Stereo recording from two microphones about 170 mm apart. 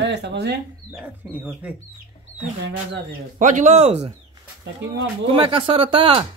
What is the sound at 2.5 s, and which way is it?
Speech, 90° right.